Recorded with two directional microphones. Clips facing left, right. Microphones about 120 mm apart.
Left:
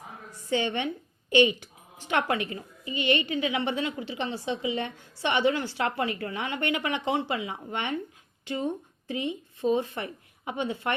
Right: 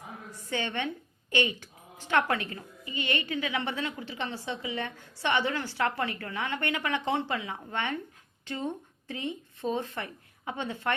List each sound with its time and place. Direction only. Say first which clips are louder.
0.5 s a woman's voice: left 4 dB; 20° left (ahead or behind)